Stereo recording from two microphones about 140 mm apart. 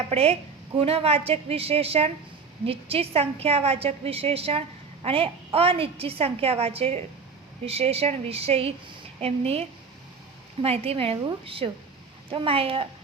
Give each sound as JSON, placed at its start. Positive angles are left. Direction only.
{"t": 0.1, "sound": "a woman's voice", "side_deg": -45}